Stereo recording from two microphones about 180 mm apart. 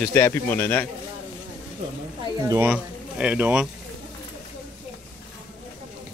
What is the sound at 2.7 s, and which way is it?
Speech, 5° right (ahead or behind).